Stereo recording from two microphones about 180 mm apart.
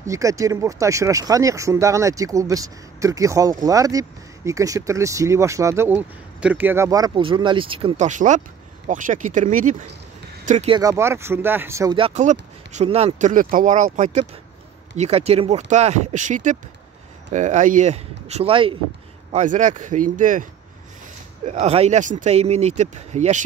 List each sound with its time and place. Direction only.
0.0 s speech: 20° right (ahead or behind); by 10.7 s 45° right (ahead or behind)
10.7 s speech: 20° right (ahead or behind)
12.0 s speech: 40° right (ahead or behind)
19.3 s speech: 45° right (ahead or behind)
21.5 s speech: 35° right (ahead or behind)